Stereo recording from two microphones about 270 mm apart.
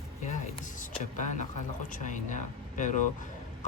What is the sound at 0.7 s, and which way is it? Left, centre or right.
Speech, left.